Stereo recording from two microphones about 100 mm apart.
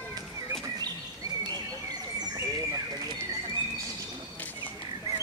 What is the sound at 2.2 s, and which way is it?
Bird, 40° right (ahead or behind).